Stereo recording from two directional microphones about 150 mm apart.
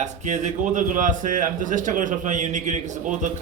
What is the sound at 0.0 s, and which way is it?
A man's voice, 55° right (ahead or behind).